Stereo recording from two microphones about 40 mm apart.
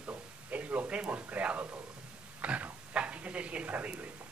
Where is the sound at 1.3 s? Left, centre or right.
Right.